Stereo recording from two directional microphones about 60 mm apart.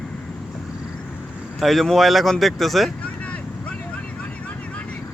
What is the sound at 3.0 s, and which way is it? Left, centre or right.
Vehicle, left.